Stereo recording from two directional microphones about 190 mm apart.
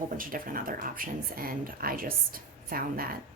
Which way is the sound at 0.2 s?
45° right (ahead or behind).